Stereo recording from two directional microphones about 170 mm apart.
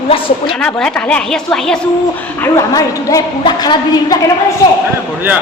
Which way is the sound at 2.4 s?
20° left (ahead or behind).